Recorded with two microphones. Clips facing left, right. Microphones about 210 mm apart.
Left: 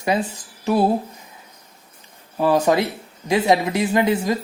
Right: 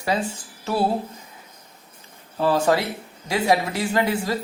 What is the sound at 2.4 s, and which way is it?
Speech, 15° left (ahead or behind).